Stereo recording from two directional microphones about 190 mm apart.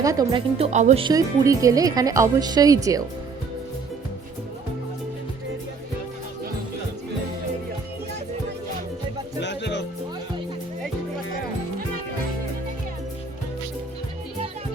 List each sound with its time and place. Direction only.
0.0 s speech: 20° right (ahead or behind); by 1.0 s 35° right (ahead or behind)
1.0 s speech: 20° right (ahead or behind)
9.4 s music: 65° left (ahead or behind)